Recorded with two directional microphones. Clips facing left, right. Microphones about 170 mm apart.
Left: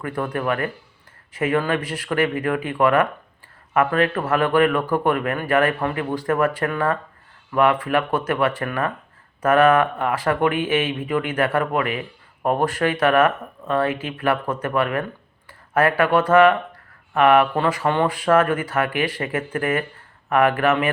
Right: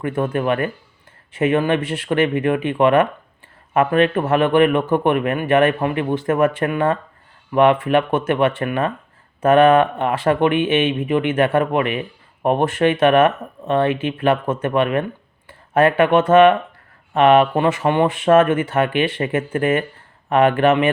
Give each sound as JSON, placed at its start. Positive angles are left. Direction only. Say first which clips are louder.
{"t": 0.0, "sound": "speech", "louder": "right 4 dB", "side_deg": -25}